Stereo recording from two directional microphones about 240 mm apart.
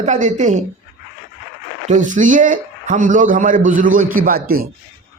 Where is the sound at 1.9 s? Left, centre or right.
Right.